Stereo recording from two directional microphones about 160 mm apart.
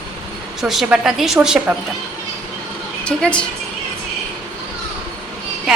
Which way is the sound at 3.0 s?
5° left (ahead or behind).